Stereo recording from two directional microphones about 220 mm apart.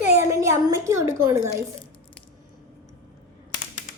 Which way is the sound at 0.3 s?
15° right (ahead or behind).